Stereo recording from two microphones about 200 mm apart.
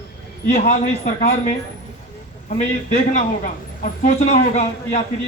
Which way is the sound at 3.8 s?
35° left (ahead or behind).